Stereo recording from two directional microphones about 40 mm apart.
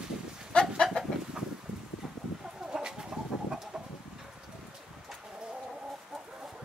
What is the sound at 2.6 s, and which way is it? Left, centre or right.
Chicken, centre.